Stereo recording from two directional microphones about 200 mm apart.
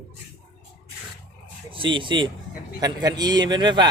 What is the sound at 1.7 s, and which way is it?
A man's voice, 25° right (ahead or behind).